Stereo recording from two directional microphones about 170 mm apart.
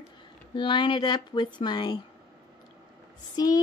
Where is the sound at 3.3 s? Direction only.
20° left (ahead or behind).